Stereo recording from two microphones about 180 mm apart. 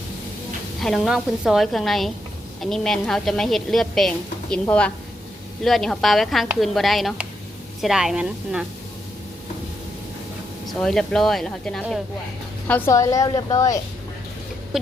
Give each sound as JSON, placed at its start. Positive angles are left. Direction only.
{"t": 0.8, "sound": "a woman's voice", "side_deg": 0}
{"t": 10.7, "sound": "a woman's voice", "side_deg": 0}